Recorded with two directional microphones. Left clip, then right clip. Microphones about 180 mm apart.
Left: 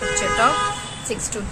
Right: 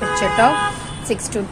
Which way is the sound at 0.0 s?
15° right (ahead or behind).